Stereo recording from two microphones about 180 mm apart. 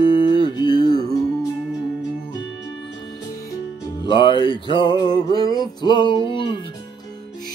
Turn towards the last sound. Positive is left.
turn(degrees=30)  # may be behind; listen again after turning